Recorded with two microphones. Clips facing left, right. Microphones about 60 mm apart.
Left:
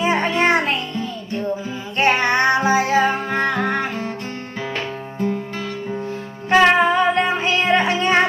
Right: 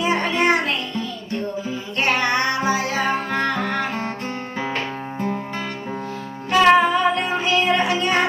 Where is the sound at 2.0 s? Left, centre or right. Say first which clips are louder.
Left 4 dB; left.